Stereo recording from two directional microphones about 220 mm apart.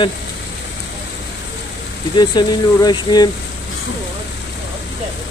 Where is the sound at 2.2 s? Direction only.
20° left (ahead or behind).